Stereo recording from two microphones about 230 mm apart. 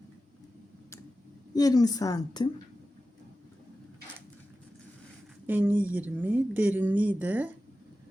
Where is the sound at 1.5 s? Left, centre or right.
Centre.